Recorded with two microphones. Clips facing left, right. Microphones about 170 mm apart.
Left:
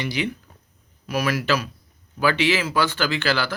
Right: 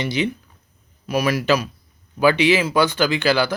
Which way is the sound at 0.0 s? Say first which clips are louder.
Right 4 dB; 25° right (ahead or behind).